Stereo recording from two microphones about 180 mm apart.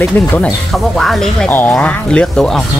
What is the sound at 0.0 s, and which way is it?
Speech, 10° left (ahead or behind).